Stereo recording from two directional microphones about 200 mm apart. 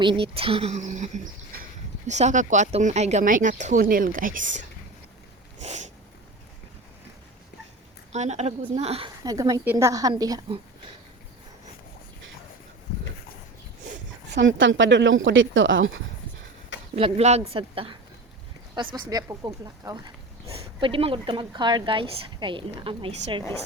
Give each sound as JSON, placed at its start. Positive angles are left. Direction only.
{"t": 0.0, "sound": "speech", "side_deg": -25}
{"t": 5.5, "sound": "sneeze", "side_deg": -35}
{"t": 8.1, "sound": "speech", "side_deg": -35}
{"t": 9.2, "sound": "a woman's voice", "side_deg": -15}
{"t": 14.3, "sound": "a woman's voice", "side_deg": -65}
{"t": 16.9, "sound": "a woman's voice", "side_deg": -30}
{"t": 20.5, "sound": "speech", "side_deg": -30}